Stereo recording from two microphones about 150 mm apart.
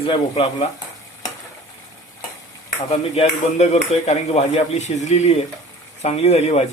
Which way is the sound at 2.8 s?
45° left (ahead or behind).